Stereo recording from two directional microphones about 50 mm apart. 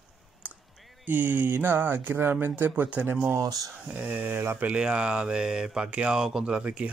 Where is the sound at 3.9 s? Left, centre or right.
Right.